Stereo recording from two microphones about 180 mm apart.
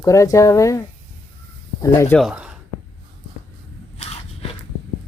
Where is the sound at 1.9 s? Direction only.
15° left (ahead or behind).